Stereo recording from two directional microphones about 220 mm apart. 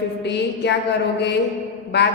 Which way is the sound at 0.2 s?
50° left (ahead or behind).